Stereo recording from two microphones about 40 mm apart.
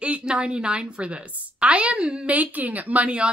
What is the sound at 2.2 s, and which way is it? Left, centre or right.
Speech, right.